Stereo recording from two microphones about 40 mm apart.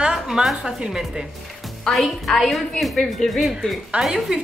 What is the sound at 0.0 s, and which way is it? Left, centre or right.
A woman's voice, centre.